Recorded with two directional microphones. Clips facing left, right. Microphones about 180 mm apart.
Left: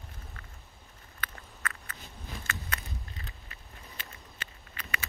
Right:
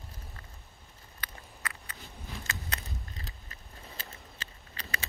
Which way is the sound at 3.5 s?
40° right (ahead or behind).